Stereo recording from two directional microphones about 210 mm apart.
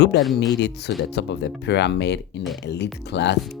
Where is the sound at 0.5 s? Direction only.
55° left (ahead or behind).